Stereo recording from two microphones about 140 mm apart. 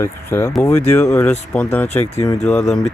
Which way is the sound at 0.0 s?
20° left (ahead or behind).